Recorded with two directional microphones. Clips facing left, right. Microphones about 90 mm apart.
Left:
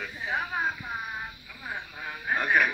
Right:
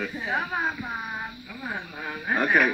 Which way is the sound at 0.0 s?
60° right (ahead or behind).